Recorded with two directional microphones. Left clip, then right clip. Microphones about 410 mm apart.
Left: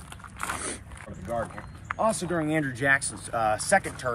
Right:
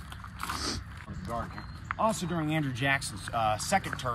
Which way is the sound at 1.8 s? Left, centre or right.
Centre.